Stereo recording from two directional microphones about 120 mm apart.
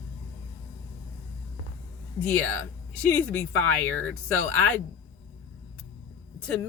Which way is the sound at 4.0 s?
15° left (ahead or behind).